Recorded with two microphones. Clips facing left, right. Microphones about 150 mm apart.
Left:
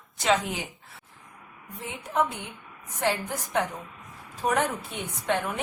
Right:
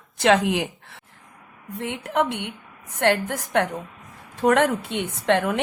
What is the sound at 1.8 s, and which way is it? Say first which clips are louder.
A woman's voice: right 4 dB; 70° right (ahead or behind).